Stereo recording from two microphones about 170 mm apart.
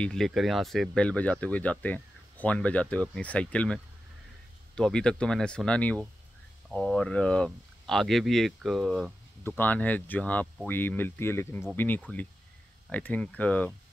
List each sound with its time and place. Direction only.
0.0 s speech: 5° left (ahead or behind)
9.6 s speech: 10° left (ahead or behind)